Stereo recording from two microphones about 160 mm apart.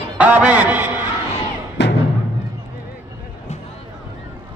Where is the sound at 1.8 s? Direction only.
90° left.